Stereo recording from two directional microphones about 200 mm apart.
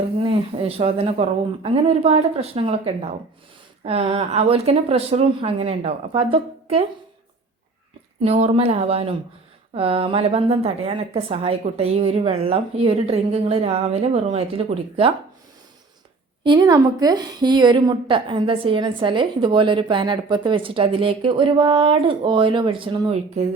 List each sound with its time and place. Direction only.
0.2 s a woman's voice: 25° right (ahead or behind)
8.2 s a woman's voice: 30° right (ahead or behind)
16.4 s a woman's voice: 20° right (ahead or behind)